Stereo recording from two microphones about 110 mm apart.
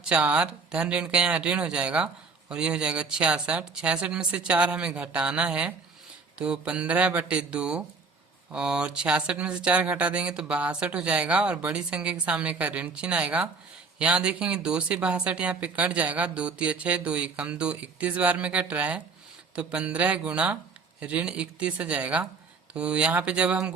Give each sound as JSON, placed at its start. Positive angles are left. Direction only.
{"t": 0.0, "sound": "speech", "side_deg": -10}